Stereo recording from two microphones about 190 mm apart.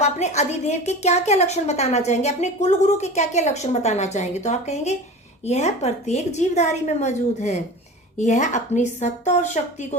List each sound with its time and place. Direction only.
0.0 s a woman's voice: 35° left (ahead or behind)